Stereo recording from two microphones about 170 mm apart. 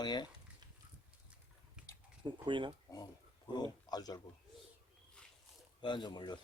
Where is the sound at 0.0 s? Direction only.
25° left (ahead or behind).